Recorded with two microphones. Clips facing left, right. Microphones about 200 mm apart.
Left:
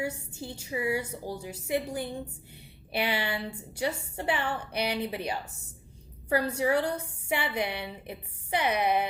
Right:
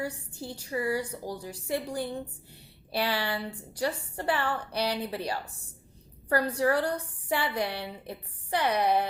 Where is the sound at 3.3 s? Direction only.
10° left (ahead or behind).